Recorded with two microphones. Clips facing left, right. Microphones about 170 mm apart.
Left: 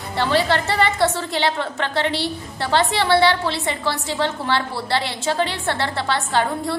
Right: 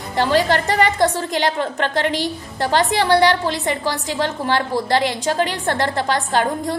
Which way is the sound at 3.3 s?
15° right (ahead or behind).